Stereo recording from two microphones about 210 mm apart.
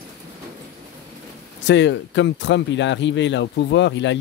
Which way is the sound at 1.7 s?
60° left (ahead or behind).